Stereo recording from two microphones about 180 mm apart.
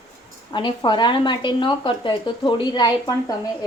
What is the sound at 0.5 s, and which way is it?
Speech, 25° left (ahead or behind).